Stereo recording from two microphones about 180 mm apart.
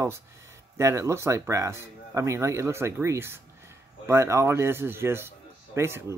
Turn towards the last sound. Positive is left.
turn(degrees=-15)  # may be behind; listen again after turning